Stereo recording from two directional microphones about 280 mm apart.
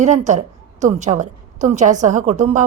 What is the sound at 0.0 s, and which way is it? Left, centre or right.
A woman's voice, right.